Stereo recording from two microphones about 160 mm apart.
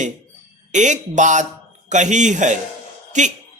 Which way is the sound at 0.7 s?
50° right (ahead or behind).